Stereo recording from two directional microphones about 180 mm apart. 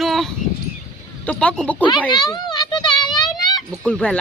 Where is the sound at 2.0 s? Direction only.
25° left (ahead or behind).